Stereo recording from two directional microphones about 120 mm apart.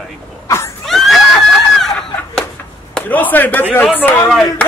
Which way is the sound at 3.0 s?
15° left (ahead or behind).